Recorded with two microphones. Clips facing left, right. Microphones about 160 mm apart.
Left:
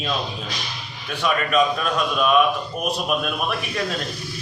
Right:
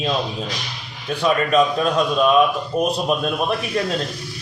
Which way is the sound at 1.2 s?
30° right (ahead or behind).